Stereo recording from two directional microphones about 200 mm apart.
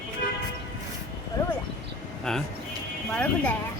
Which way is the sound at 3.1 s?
5° left (ahead or behind).